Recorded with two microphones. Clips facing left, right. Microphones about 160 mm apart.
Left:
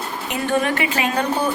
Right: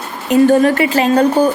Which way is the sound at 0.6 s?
35° right (ahead or behind).